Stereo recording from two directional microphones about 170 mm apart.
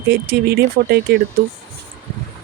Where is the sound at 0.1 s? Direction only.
70° right (ahead or behind).